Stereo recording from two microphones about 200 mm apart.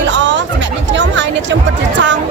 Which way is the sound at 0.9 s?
65° right (ahead or behind).